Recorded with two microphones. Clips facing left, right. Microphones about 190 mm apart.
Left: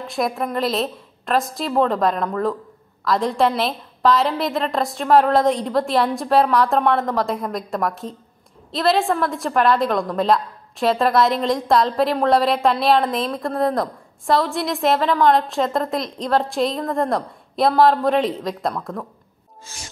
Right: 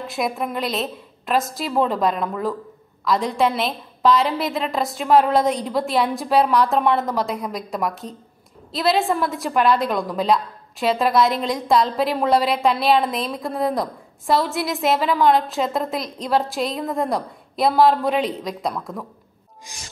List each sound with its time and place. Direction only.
0.0 s a woman's voice: centre (ahead or behind)
19.7 s music: 15° right (ahead or behind)